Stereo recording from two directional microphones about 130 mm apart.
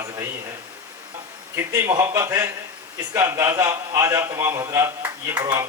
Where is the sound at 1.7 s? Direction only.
20° right (ahead or behind).